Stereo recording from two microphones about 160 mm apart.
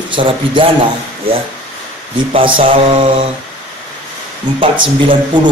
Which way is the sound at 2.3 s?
35° right (ahead or behind).